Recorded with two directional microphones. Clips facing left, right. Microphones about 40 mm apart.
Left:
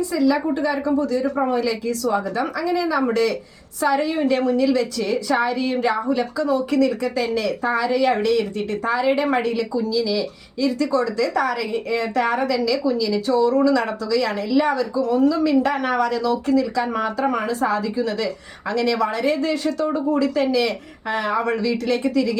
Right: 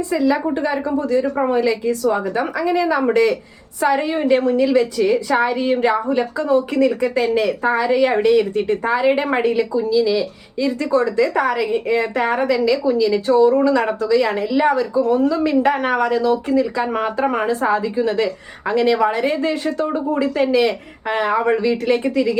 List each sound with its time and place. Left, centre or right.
0.3 s a woman's voice: right